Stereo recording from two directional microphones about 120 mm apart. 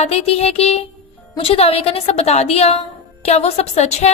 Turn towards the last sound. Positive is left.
turn(degrees=65)  # may be behind; listen again after turning